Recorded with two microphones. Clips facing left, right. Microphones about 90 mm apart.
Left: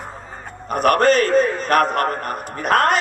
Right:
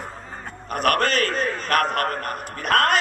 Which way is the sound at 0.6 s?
25° left (ahead or behind).